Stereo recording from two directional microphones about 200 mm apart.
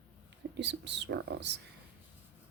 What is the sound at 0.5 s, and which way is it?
Speech, 60° right (ahead or behind).